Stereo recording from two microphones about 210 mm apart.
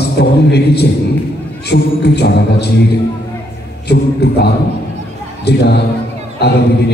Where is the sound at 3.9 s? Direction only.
50° left (ahead or behind).